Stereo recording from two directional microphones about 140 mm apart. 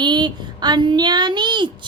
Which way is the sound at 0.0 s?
30° right (ahead or behind).